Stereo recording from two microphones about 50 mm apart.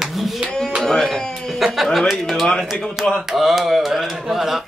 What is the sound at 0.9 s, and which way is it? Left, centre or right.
Speech, centre.